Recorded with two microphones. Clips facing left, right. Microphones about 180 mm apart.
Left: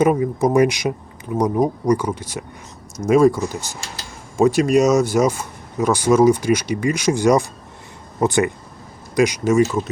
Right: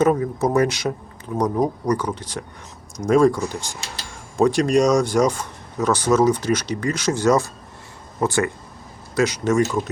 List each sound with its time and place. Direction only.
0.0 s speech: 10° left (ahead or behind)